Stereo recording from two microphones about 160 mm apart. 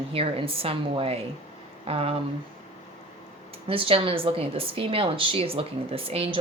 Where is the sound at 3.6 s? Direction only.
35° right (ahead or behind).